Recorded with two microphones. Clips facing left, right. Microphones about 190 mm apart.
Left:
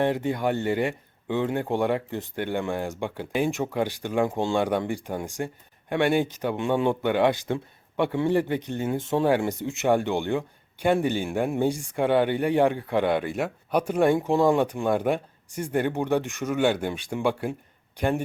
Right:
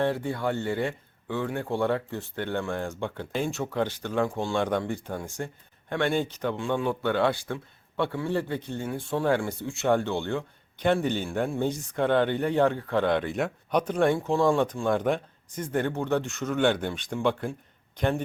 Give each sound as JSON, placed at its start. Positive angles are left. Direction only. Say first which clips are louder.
{"t": 0.0, "sound": "speech", "louder": "left 3 dB", "side_deg": 20}
{"t": 4.5, "sound": "speech", "louder": "left 2 dB", "side_deg": 10}
{"t": 14.2, "sound": "speech", "louder": "left 2 dB", "side_deg": 20}
{"t": 17.5, "sound": "a sound", "louder": "left 4 dB", "side_deg": 15}